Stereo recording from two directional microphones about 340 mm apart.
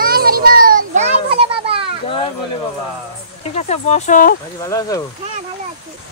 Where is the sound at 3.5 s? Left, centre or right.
Centre.